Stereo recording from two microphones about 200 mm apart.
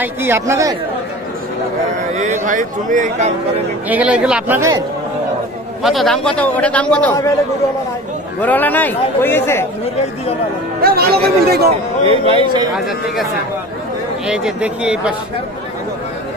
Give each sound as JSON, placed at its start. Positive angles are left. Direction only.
{"t": 0.0, "sound": "a man's voice", "side_deg": -10}
{"t": 2.4, "sound": "speech", "side_deg": -40}
{"t": 3.9, "sound": "a man's voice", "side_deg": -5}
{"t": 5.8, "sound": "a man's voice", "side_deg": 0}
{"t": 8.4, "sound": "a man's voice", "side_deg": 10}
{"t": 10.8, "sound": "speech", "side_deg": -50}
{"t": 12.3, "sound": "speech", "side_deg": -25}
{"t": 12.7, "sound": "speech", "side_deg": 0}